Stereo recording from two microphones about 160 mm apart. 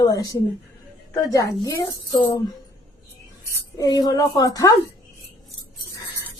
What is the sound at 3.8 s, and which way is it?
Speech, 25° left (ahead or behind).